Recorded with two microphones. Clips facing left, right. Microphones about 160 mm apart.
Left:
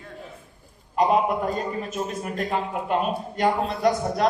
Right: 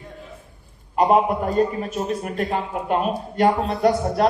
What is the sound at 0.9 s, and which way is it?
A man's voice, 45° right (ahead or behind).